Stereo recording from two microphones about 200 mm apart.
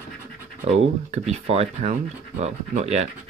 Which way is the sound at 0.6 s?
30° right (ahead or behind).